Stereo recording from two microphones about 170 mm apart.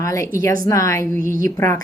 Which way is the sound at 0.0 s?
20° left (ahead or behind).